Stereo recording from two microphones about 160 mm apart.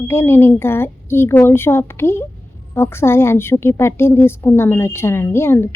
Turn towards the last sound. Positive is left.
turn(degrees=15)  # may be behind; listen again after turning